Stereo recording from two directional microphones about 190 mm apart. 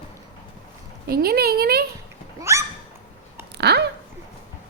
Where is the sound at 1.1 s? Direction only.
55° right (ahead or behind).